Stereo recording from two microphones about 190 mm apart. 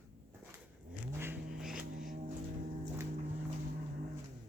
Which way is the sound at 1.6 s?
Centre (ahead or behind).